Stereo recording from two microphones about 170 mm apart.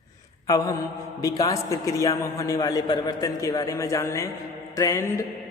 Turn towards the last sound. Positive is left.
turn(degrees=15)  # may be behind; listen again after turning